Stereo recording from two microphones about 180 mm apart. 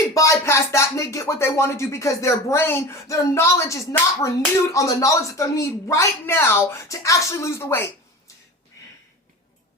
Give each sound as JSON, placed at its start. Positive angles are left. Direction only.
{"t": 0.1, "sound": "speech", "side_deg": 15}